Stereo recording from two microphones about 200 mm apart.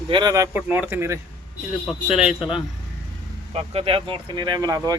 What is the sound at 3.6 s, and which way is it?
Speech, 30° right (ahead or behind).